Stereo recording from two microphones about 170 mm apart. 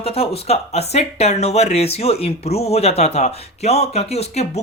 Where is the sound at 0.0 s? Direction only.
35° left (ahead or behind).